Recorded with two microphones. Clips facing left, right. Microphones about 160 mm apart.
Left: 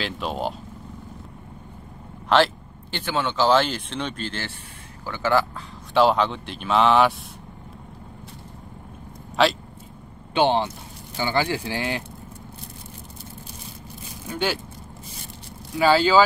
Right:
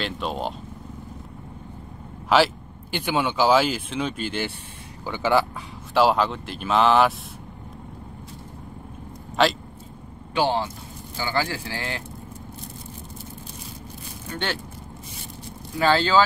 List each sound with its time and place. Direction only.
0.0 s speech: centre (ahead or behind)
2.2 s speech: 5° right (ahead or behind)
5.9 s speech: centre (ahead or behind)
10.3 s speech: 20° left (ahead or behind)
14.3 s speech: 10° left (ahead or behind)
15.8 s speech: 5° left (ahead or behind)